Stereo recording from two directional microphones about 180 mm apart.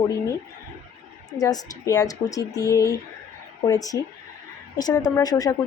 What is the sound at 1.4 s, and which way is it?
A woman's voice, 20° left (ahead or behind).